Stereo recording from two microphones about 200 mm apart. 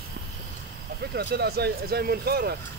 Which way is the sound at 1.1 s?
50° right (ahead or behind).